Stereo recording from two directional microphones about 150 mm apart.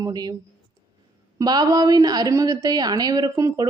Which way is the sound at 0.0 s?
25° right (ahead or behind).